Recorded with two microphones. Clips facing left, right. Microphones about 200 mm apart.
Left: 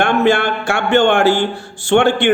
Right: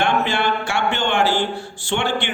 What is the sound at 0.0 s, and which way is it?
A man's voice, 50° left (ahead or behind).